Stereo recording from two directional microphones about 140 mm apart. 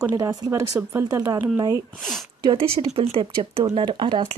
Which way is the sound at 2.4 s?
35° right (ahead or behind).